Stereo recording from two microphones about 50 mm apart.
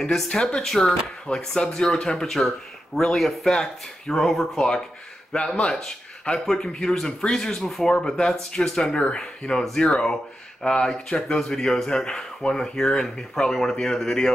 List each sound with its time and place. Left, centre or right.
0.1 s speech: centre
1.3 s speech: left
1.8 s speech: centre
4.6 s speech: centre
7.9 s speech: centre
8.5 s speech: centre